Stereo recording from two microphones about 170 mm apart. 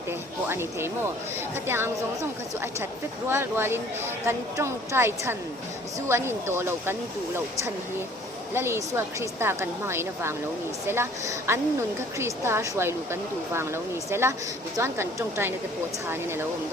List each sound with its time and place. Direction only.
0.1 s a woman's voice: 15° right (ahead or behind)
3.2 s a woman's voice: 15° right (ahead or behind)